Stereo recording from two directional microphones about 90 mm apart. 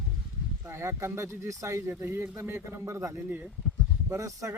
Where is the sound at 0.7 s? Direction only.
30° right (ahead or behind).